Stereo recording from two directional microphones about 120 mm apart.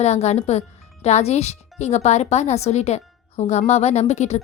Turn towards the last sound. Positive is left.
turn(degrees=65)  # may be behind; listen again after turning